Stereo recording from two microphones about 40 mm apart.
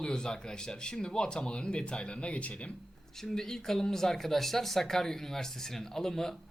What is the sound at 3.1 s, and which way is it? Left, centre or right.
Speech, centre.